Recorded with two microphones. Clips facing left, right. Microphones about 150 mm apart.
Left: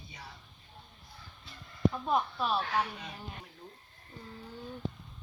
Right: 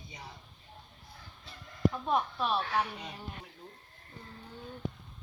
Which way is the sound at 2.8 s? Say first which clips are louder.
Even; 10° right (ahead or behind).